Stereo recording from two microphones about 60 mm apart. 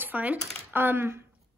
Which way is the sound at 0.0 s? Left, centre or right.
Right.